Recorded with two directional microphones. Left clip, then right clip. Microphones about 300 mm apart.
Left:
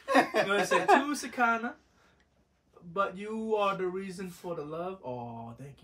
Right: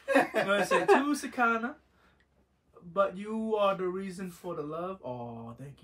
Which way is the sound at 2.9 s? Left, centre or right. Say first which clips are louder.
Right 2 dB; centre.